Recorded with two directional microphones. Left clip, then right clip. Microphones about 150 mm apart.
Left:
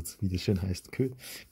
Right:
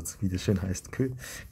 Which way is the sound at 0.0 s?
25° left (ahead or behind).